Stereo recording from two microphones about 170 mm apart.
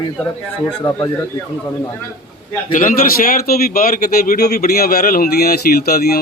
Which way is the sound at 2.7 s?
50° left (ahead or behind).